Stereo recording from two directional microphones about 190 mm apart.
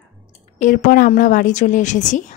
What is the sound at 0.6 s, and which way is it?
A woman's voice, 45° left (ahead or behind).